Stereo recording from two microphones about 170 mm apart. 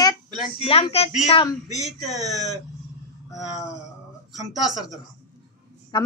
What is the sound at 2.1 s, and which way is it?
Speech, 20° right (ahead or behind).